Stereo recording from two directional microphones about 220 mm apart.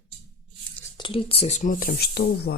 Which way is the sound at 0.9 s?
20° left (ahead or behind).